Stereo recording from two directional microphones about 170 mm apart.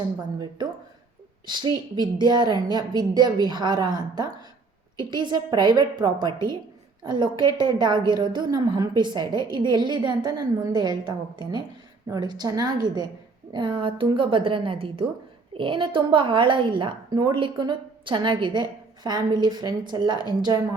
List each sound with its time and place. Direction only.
1.5 s a woman's voice: 25° right (ahead or behind)